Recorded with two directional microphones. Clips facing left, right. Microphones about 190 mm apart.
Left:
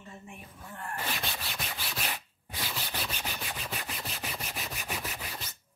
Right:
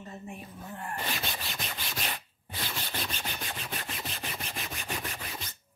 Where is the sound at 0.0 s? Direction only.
40° right (ahead or behind).